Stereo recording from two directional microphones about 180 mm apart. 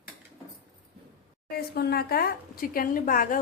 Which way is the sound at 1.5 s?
60° left (ahead or behind).